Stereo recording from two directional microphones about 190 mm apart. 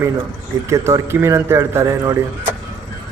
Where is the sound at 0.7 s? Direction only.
15° right (ahead or behind).